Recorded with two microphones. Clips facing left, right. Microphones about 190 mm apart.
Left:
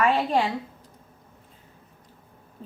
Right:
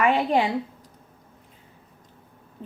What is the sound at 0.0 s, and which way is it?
Speech, 15° right (ahead or behind).